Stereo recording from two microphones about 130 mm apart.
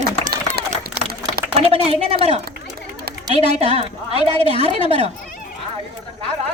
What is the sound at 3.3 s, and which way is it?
A woman's voice, 50° right (ahead or behind).